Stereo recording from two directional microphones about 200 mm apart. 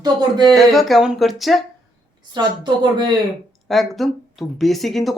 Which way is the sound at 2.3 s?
20° right (ahead or behind).